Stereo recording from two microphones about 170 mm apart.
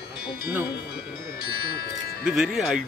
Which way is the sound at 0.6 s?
70° left (ahead or behind).